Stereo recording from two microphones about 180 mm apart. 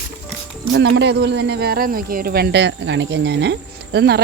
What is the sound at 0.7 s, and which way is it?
Speech, 70° right (ahead or behind).